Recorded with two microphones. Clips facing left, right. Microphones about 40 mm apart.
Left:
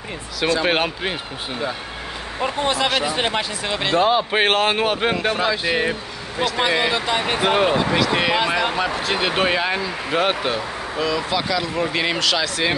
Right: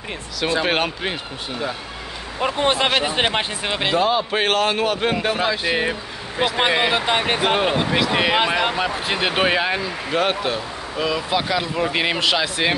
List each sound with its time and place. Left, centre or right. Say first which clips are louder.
0.7 s speech: left 1 dB; centre
2.4 s speech: right 2 dB; right
4.0 s a man's voice: left 5 dB; centre
5.1 s speech: even; centre
6.3 s speech: right 1 dB; centre
7.3 s speech: left 1 dB; centre
11.0 s speech: right 1 dB; centre